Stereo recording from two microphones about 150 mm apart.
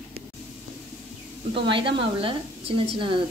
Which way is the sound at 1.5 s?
35° right (ahead or behind).